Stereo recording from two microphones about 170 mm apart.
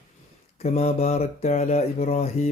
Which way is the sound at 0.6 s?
35° left (ahead or behind).